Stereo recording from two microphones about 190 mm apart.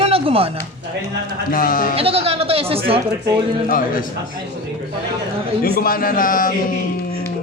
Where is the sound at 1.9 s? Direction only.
30° right (ahead or behind).